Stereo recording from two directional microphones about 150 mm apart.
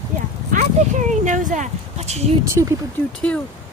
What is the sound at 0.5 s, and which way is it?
Speech, 55° right (ahead or behind).